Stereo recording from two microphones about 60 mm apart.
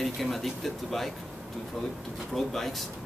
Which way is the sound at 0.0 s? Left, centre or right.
Centre.